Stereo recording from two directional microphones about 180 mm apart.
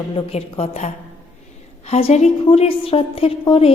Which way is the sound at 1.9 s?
35° left (ahead or behind).